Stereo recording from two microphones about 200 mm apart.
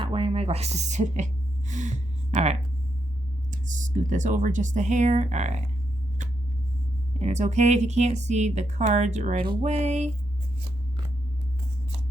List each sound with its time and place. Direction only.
0.0 s speech: 30° right (ahead or behind)
7.2 s speech: 35° right (ahead or behind)